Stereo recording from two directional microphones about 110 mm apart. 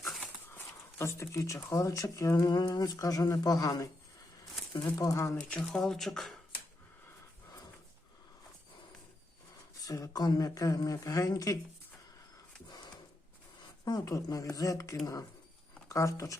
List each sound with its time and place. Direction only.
0.9 s speech: 25° left (ahead or behind)
4.9 s speech: 30° left (ahead or behind)
5.5 s speech: 5° left (ahead or behind)
9.8 s speech: 30° left (ahead or behind)
12.6 s a sound: 40° left (ahead or behind)
13.8 s speech: 35° left (ahead or behind)